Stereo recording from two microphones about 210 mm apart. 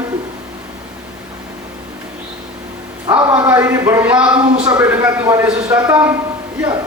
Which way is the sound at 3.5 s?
10° right (ahead or behind).